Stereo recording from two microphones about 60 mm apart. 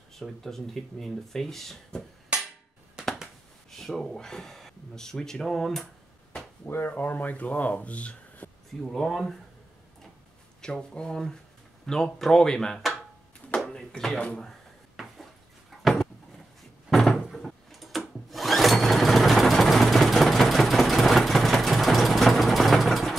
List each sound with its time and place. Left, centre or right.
0.1 s speech: centre
3.7 s speech: centre
6.6 s speech: left
8.9 s speech: centre
10.6 s speech: centre
13.9 s speech: centre
15.7 s a sound: centre
16.9 s cupboard open or close: centre
17.3 s sewing machine: centre